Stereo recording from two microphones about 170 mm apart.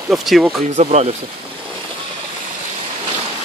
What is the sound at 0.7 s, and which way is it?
Speech, 40° right (ahead or behind).